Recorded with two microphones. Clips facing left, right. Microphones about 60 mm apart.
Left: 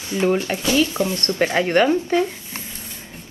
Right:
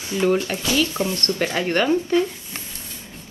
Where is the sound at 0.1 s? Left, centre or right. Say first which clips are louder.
Even; left.